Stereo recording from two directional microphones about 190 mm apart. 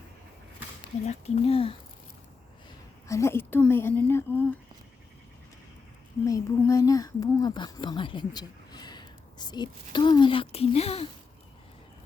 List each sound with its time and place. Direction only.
1.0 s speech: 35° left (ahead or behind)
3.1 s a woman's voice: 15° left (ahead or behind)
6.2 s speech: 15° left (ahead or behind); by 11.0 s 30° left (ahead or behind)